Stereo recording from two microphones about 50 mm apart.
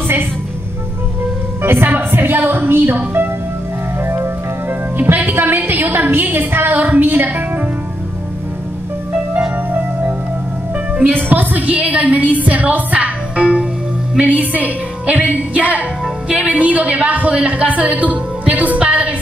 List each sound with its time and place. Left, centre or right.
1.6 s a woman's voice: right
4.0 s speech: right
9.7 s music: right
11.2 s a woman's voice: right